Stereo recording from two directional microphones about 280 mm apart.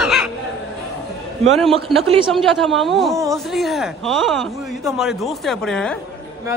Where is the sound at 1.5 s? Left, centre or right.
Centre.